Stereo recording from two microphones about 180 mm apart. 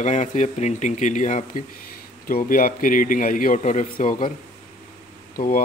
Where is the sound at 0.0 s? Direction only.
40° left (ahead or behind).